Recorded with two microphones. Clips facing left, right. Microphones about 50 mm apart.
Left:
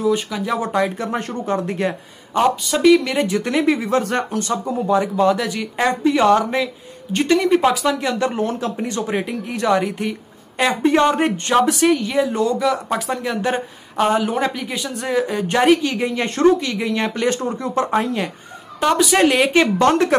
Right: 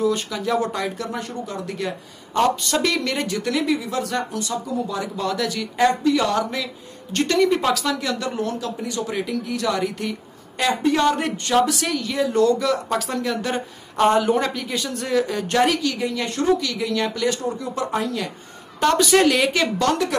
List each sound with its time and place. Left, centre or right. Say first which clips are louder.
0.0 s a woman's voice: left 2 dB; centre; by 2.0 s left
2.6 s speech: left 8 dB; centre
3.3 s a woman's voice: left 4 dB; left
7.1 s a woman's voice: left 3 dB; centre
13.9 s speech: right 1 dB; centre
14.4 s a woman's voice: left 2 dB; centre; by 18.3 s left
18.8 s speech: left 1 dB; centre; by 20.2 s left